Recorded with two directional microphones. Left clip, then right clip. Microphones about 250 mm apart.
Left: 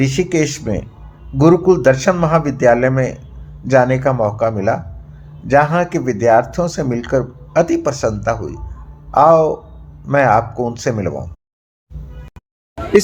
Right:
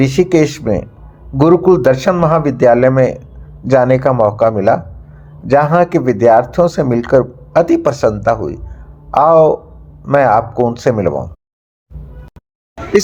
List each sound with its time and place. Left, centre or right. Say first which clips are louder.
0.0 s speech: right 5 dB; centre